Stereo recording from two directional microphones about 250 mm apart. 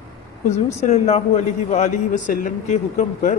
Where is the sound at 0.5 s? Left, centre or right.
Left.